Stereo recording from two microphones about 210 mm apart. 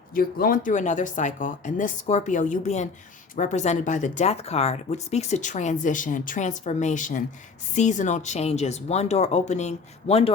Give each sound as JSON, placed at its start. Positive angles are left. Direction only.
{"t": 0.1, "sound": "speech", "side_deg": 45}